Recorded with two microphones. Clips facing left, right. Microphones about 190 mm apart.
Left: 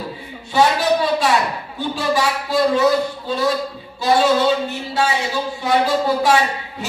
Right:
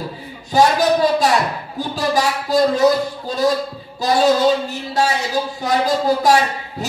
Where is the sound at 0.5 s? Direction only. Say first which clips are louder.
Right 2 dB; 40° right (ahead or behind).